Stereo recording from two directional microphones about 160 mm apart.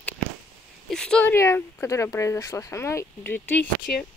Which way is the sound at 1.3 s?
15° left (ahead or behind).